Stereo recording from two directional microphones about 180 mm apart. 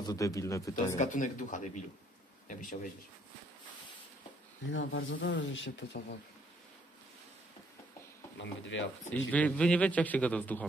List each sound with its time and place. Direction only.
0.0 s a man's voice: 20° left (ahead or behind)
0.9 s speech: 45° left (ahead or behind)
4.6 s speech: 90° left
8.4 s speech: 90° left
9.3 s a man's voice: 5° left (ahead or behind)